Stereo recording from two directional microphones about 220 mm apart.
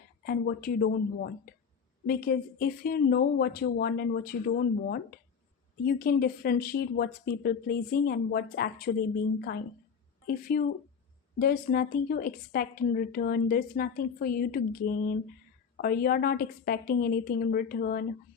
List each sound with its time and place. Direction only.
0.3 s a woman's voice: 45° left (ahead or behind)
11.3 s a woman's voice: 45° left (ahead or behind)